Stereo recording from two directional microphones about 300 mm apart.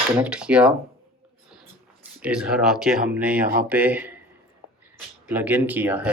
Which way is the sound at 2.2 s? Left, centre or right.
Centre.